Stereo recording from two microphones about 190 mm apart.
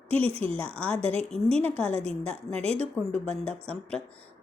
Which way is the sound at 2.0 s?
30° right (ahead or behind).